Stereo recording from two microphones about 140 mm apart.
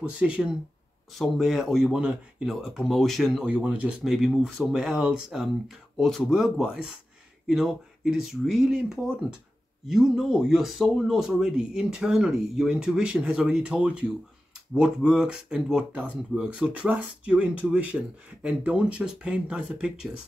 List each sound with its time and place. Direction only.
0.0 s speech: 10° right (ahead or behind)